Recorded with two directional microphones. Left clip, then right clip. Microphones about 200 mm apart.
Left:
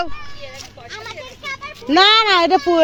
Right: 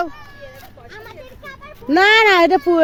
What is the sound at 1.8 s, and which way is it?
Speech, 25° right (ahead or behind).